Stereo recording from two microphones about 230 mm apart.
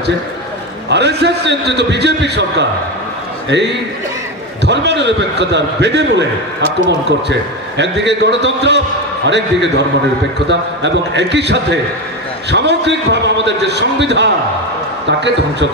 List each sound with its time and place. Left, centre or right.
0.8 s a man's voice: right